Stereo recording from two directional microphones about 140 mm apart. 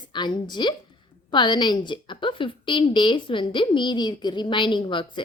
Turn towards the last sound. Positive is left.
turn(degrees=35)  # may be behind; listen again after turning